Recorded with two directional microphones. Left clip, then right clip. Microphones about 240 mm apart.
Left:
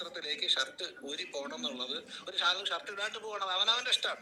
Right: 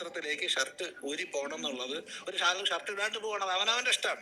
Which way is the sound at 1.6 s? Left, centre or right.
Right.